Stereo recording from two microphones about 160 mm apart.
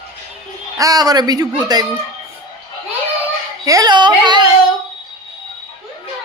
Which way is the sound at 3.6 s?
20° right (ahead or behind).